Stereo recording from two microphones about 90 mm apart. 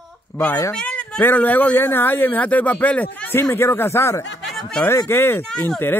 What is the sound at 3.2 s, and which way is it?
Speech, 25° left (ahead or behind).